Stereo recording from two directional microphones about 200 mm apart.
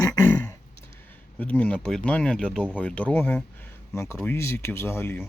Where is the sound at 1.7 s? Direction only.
5° left (ahead or behind).